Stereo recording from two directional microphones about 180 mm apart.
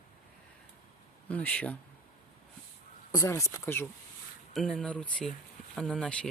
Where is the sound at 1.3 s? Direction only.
5° left (ahead or behind).